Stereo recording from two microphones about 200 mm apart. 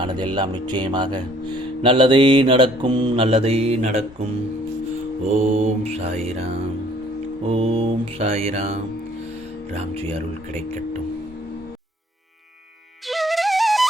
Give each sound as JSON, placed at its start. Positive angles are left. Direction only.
{"t": 0.0, "sound": "mantra", "side_deg": -20}
{"t": 5.4, "sound": "mantra", "side_deg": -30}
{"t": 7.5, "sound": "mantra", "side_deg": -30}
{"t": 13.1, "sound": "music", "side_deg": 0}